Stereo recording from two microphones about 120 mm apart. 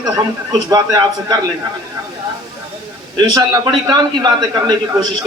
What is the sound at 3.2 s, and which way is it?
A man's voice, 35° right (ahead or behind).